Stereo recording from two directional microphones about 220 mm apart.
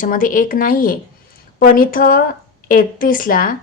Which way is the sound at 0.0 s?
40° left (ahead or behind).